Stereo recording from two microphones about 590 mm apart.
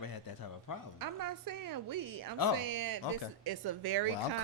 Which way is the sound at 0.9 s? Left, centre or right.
Right.